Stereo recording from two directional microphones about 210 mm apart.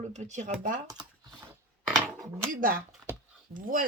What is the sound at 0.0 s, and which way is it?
Speech, 35° right (ahead or behind).